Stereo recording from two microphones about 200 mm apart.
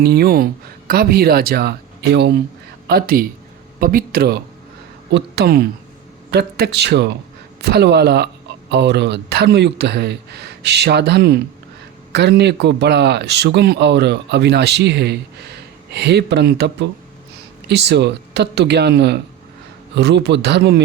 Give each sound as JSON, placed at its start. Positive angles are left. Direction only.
{"t": 0.0, "sound": "speech", "side_deg": -50}